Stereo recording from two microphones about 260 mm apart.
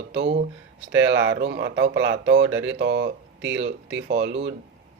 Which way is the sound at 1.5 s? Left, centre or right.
Right.